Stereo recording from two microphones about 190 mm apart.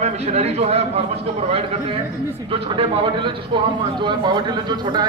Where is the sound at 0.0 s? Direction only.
35° right (ahead or behind).